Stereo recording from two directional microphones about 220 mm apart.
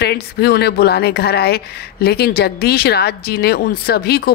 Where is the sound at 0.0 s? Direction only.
45° left (ahead or behind).